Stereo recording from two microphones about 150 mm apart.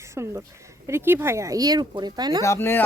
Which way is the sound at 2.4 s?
15° left (ahead or behind).